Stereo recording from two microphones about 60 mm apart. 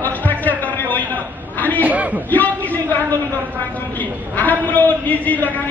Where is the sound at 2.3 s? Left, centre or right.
Left.